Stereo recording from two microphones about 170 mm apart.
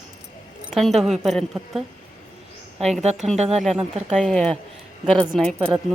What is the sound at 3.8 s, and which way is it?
Speech, 40° right (ahead or behind).